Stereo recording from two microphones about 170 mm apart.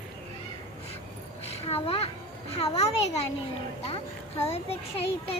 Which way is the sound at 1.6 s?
35° left (ahead or behind).